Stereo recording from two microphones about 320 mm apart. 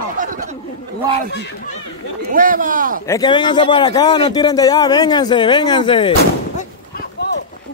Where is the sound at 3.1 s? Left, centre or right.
Centre.